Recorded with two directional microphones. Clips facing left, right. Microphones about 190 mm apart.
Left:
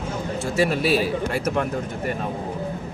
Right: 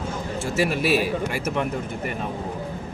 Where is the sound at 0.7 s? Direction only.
5° right (ahead or behind).